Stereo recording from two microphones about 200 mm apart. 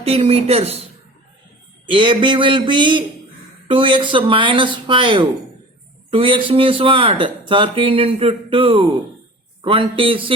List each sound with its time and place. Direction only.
0.0 s a woman's voice: 30° right (ahead or behind)
1.9 s a man's voice: 25° right (ahead or behind)